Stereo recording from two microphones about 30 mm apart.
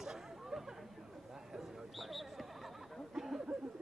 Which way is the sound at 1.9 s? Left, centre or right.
Centre.